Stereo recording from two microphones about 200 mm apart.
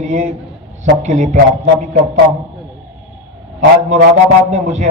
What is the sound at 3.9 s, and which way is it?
Speech, 35° right (ahead or behind).